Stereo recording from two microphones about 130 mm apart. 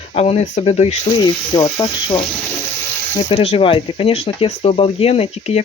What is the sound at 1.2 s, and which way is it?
Speech, 30° left (ahead or behind).